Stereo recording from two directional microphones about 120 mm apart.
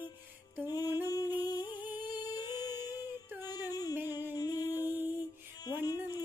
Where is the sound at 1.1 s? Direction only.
30° left (ahead or behind).